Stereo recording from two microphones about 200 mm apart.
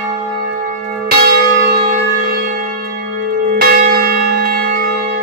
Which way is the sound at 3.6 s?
50° right (ahead or behind).